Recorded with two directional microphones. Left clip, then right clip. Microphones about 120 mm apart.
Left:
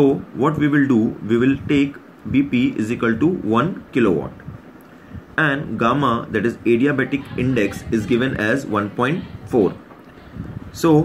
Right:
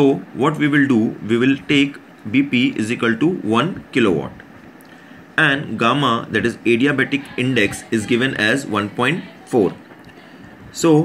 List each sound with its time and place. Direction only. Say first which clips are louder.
0.0 s speech: right 1 dB; 10° right (ahead or behind)
5.3 s speech: right 3 dB; 15° right (ahead or behind)